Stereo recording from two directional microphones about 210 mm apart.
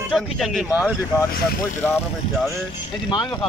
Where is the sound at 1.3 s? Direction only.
45° left (ahead or behind).